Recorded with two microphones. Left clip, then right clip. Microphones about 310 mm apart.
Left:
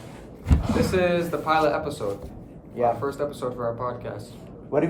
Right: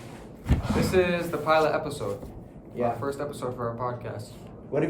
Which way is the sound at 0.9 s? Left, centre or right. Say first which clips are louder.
Even; centre.